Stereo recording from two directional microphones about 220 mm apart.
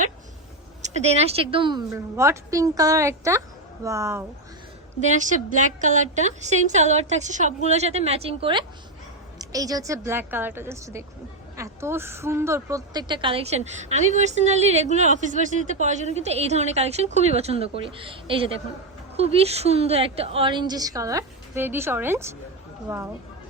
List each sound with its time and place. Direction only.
0.8 s a woman's voice: 30° right (ahead or behind)
2.1 s a woman's voice: 10° right (ahead or behind)
5.1 s a woman's voice: 35° right (ahead or behind); by 23.0 s 10° right (ahead or behind)